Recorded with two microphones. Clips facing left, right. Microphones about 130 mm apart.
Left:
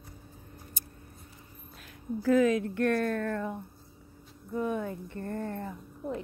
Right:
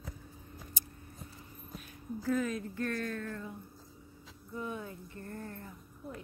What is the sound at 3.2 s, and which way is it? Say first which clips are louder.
Speech: left 9 dB; 80° left.